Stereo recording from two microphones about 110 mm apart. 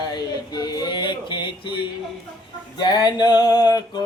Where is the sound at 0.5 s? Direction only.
40° left (ahead or behind).